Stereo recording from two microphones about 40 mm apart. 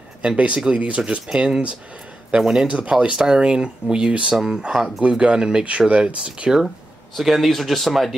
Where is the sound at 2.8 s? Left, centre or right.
Right.